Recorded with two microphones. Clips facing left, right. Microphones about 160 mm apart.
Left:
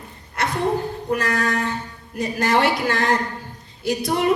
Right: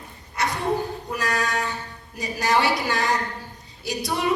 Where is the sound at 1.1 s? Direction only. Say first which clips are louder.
Left 6 dB; 55° left (ahead or behind).